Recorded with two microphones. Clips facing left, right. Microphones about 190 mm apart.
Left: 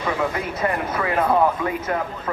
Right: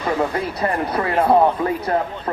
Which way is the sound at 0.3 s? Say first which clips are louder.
Right 2 dB; 40° right (ahead or behind).